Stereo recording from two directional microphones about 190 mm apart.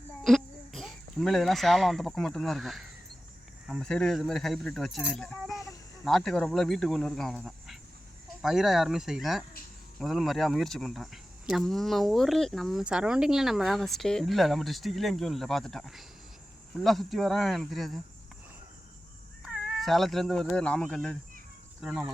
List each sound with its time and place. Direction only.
0.3 s a child's voice: centre (ahead or behind)
5.5 s a sound: 15° left (ahead or behind)
6.1 s speech: centre (ahead or behind)
19.5 s speech: centre (ahead or behind)